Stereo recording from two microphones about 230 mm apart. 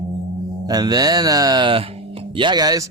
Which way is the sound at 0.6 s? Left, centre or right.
Centre.